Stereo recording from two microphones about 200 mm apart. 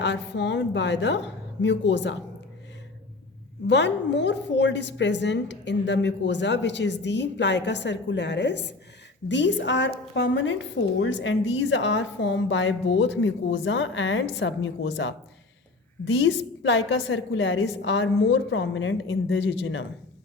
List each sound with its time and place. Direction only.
0.0 s a woman's voice: 60° left (ahead or behind)
3.7 s a woman's voice: 60° left (ahead or behind)